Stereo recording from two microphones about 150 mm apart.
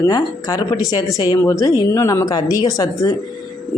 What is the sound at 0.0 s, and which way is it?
Speech, 25° left (ahead or behind).